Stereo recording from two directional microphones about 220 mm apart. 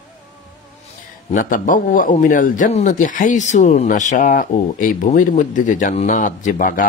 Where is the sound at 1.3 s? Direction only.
40° left (ahead or behind).